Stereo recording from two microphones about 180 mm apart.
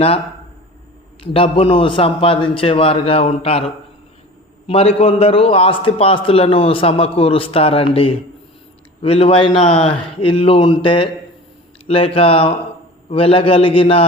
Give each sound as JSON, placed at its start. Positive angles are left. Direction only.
{"t": 1.2, "sound": "a man's voice", "side_deg": 30}
{"t": 9.0, "sound": "a man's voice", "side_deg": 30}